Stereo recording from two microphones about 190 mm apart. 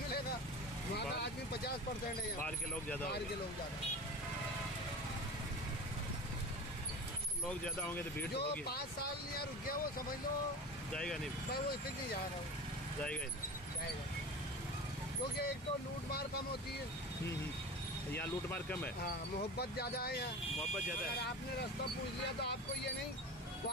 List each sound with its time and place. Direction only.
0.9 s vehicle: 60° left (ahead or behind)
2.4 s speech: 10° left (ahead or behind)
7.4 s speech: 5° left (ahead or behind)
8.4 s speech: 55° left (ahead or behind)
10.9 s speech: 5° left (ahead or behind)
18.2 s speech: 10° left (ahead or behind)
19.6 s speech: 55° left (ahead or behind)